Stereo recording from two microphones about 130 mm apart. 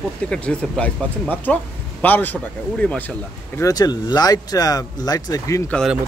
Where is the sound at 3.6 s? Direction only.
30° left (ahead or behind).